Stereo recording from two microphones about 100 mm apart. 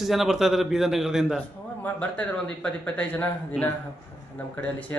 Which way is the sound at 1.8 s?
15° left (ahead or behind).